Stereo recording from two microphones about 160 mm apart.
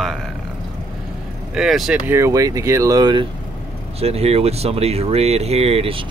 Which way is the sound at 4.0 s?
40° right (ahead or behind).